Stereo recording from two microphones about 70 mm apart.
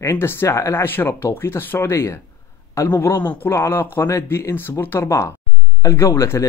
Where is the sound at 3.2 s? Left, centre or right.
Left.